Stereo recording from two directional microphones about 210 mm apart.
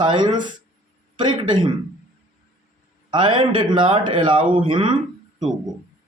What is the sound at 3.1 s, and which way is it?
Speech, 20° right (ahead or behind).